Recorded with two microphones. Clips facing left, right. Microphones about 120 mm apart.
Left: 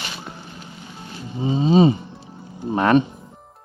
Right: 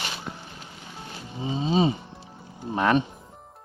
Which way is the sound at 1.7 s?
55° left (ahead or behind).